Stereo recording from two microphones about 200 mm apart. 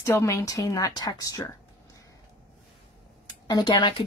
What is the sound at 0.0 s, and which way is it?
Speech, 15° left (ahead or behind).